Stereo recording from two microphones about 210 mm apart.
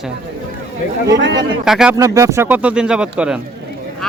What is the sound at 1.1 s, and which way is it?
Speech, 60° right (ahead or behind).